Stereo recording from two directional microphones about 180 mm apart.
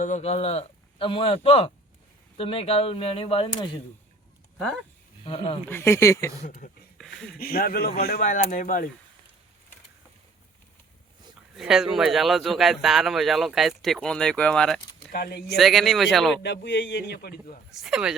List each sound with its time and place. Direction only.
0.0 s speech: 40° left (ahead or behind)
5.2 s speech: 30° left (ahead or behind)
5.6 s speech: 15° left (ahead or behind)
6.4 s speech: 45° left (ahead or behind)
7.0 s a sound: 5° left (ahead or behind)
7.3 s speech: 55° left (ahead or behind)
11.5 s speech: 5° right (ahead or behind)
15.1 s speech: 60° left (ahead or behind)
15.5 s speech: centre (ahead or behind)
16.4 s a man's voice: 75° left (ahead or behind); by 17.6 s 60° left (ahead or behind)
17.7 s speech: centre (ahead or behind)